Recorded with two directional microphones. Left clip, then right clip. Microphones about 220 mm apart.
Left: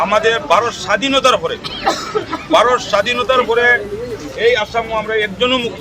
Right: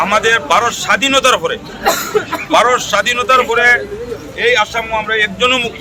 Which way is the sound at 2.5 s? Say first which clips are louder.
Right 1 dB; 10° left (ahead or behind).